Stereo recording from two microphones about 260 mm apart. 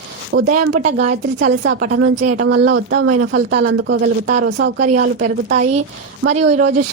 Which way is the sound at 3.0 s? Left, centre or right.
Right.